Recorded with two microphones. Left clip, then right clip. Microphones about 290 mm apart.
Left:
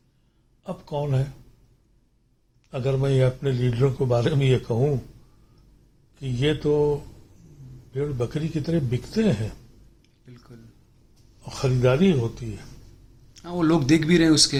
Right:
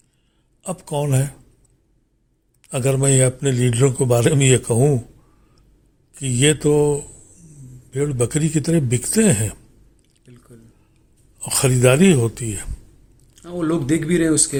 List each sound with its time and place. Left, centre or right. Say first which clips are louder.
0.6 s a man's voice: right 5 dB; right
2.6 s a man's voice: right 6 dB; right
6.1 s a man's voice: right 7 dB; right
11.4 s a man's voice: right 6 dB; right
13.4 s speech: even; centre